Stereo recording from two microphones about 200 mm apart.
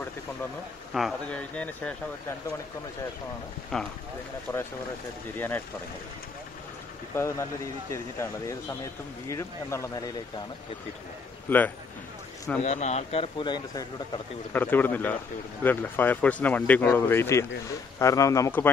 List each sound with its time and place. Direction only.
0.9 s speech: centre (ahead or behind)
3.7 s speech: centre (ahead or behind)
7.2 s speech: 15° left (ahead or behind)
11.4 s a man's voice: 10° left (ahead or behind)
12.6 s speech: 35° left (ahead or behind)
14.5 s speech: 10° left (ahead or behind)